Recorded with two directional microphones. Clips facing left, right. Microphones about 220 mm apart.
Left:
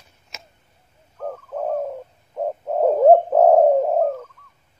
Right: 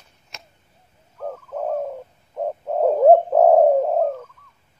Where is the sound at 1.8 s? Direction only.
Centre (ahead or behind).